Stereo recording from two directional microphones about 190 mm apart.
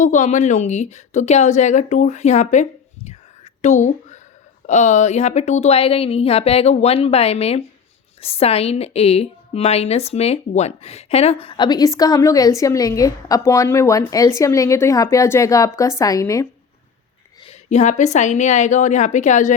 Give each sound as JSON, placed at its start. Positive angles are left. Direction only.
{"t": 0.0, "sound": "a woman's voice", "side_deg": 40}
{"t": 17.4, "sound": "a woman's voice", "side_deg": 35}